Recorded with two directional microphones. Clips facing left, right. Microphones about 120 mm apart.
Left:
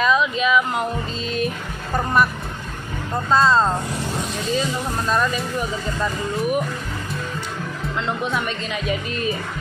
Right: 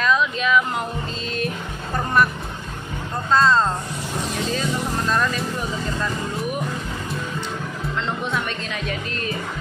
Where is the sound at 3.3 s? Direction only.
5° left (ahead or behind).